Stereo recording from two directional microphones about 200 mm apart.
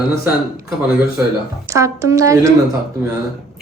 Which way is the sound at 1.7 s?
15° right (ahead or behind).